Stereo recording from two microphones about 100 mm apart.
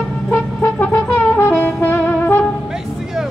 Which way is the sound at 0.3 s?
25° left (ahead or behind).